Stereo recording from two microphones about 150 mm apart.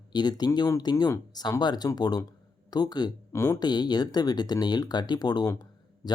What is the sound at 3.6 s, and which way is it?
Speech, 30° left (ahead or behind).